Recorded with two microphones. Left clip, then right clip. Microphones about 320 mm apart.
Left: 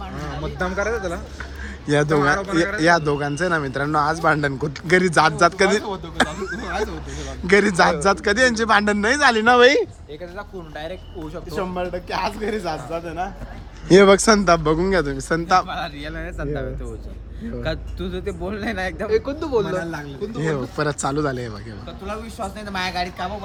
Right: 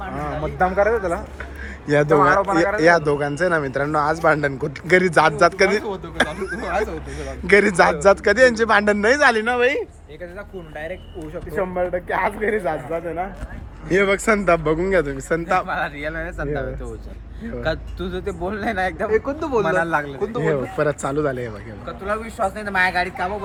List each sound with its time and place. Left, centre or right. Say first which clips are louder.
0.2 s a sound: right 6 dB; right
2.0 s speech: right 4 dB; centre
2.8 s speech: right 1 dB; centre
6.5 s speech: right 3 dB; centre
9.4 s speech: left 5 dB; left
10.3 s speech: right 1 dB; centre
19.1 s speech: right 1 dB; right
20.4 s speech: right 3 dB; centre